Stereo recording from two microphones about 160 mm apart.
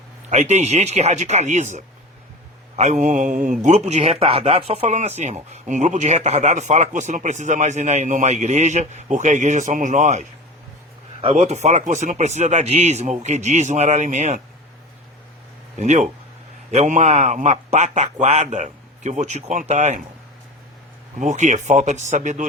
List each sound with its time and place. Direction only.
0.3 s speech: 45° right (ahead or behind)
15.8 s speech: 45° right (ahead or behind)
21.2 s speech: 50° right (ahead or behind)